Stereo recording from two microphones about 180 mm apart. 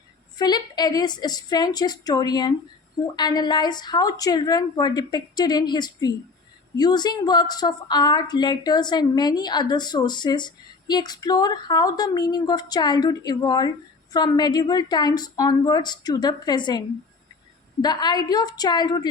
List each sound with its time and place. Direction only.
0.3 s a woman's voice: 20° left (ahead or behind)
17.8 s a woman's voice: 20° left (ahead or behind)